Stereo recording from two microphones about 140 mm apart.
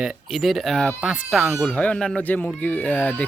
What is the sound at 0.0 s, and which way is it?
Speech, centre (ahead or behind).